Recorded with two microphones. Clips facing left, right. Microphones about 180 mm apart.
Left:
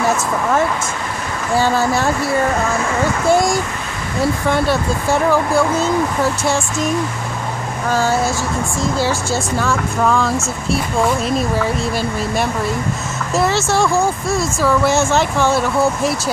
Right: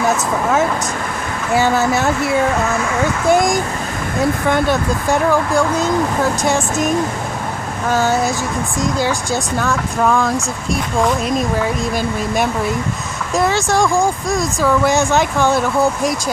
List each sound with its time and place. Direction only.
1.5 s speech: centre (ahead or behind)
3.3 s speech: 20° right (ahead or behind)
5.5 s speech: 15° right (ahead or behind)
7.9 s speech: centre (ahead or behind)
9.3 s speech: centre (ahead or behind)
13.3 s speech: 5° left (ahead or behind)
13.6 s speech: 15° right (ahead or behind)
14.6 s speech: centre (ahead or behind)